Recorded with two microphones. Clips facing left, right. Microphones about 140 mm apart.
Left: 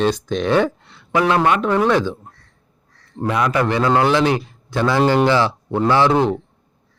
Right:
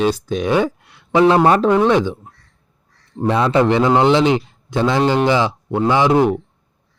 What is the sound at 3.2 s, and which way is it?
A man's voice, 30° right (ahead or behind).